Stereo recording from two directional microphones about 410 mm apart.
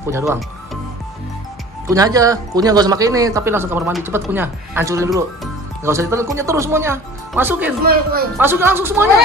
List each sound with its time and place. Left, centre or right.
0.0 s speech: centre
1.9 s speech: centre
7.8 s speech: right
8.4 s a woman's voice: centre